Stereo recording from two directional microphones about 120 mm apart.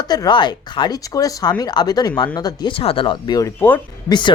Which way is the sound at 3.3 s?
20° left (ahead or behind).